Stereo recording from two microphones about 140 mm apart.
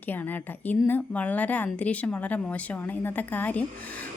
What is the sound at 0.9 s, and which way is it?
A woman's voice, 10° left (ahead or behind).